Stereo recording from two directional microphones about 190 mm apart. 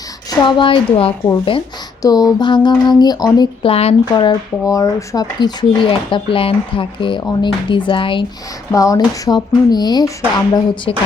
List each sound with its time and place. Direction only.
0.3 s speech: 25° left (ahead or behind)